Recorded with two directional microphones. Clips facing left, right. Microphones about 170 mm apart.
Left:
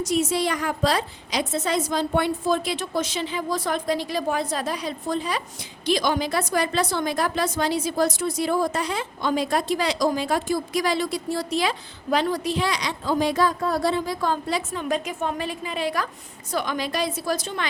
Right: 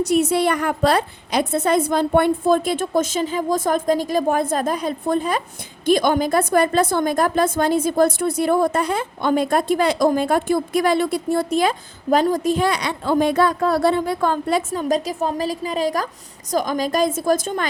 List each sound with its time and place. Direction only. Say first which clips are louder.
0.0 s a woman's voice: right 5 dB; 60° right (ahead or behind)